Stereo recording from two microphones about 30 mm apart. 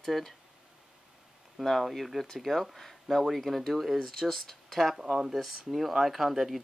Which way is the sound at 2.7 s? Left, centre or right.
Centre.